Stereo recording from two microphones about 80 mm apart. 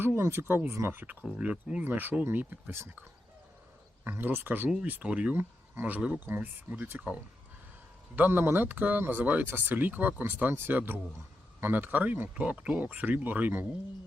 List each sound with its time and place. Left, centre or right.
0.2 s speech: right
1.2 s speech: centre; by 3.0 s right
4.0 s speech: right
5.0 s speech: centre